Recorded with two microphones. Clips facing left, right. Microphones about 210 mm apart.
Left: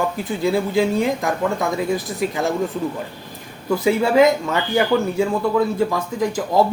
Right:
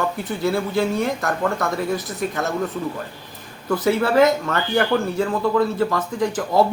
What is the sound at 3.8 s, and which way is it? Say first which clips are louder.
Speech: left 2 dB; 15° left (ahead or behind).